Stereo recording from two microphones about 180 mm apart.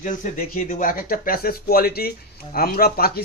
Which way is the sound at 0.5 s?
50° left (ahead or behind).